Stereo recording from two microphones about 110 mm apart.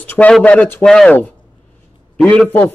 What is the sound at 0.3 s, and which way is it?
Speech, 10° left (ahead or behind).